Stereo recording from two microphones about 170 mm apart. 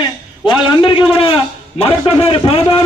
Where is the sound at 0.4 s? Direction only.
30° left (ahead or behind).